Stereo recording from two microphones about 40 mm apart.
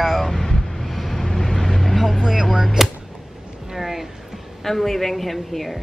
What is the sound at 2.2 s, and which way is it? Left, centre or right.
Speech, centre.